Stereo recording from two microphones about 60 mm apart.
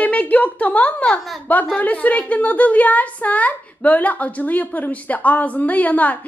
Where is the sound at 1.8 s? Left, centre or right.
Left.